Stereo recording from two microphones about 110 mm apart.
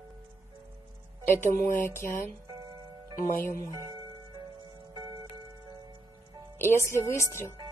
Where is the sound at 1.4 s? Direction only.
20° left (ahead or behind).